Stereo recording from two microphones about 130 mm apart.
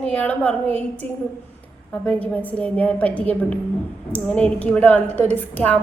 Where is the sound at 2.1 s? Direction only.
10° left (ahead or behind).